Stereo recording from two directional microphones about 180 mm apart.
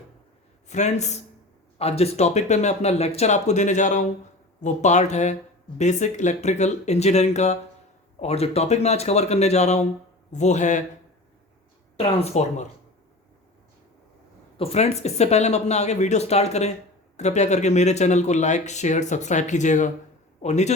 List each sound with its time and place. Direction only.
0.7 s speech: 40° left (ahead or behind)
11.9 s speech: 35° left (ahead or behind)
14.6 s speech: 35° left (ahead or behind)